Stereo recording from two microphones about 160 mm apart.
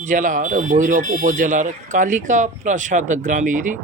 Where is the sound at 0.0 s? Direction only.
55° right (ahead or behind).